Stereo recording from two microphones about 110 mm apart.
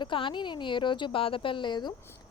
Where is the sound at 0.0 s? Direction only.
50° left (ahead or behind).